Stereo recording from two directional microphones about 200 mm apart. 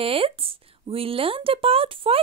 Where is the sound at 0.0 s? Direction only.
30° right (ahead or behind).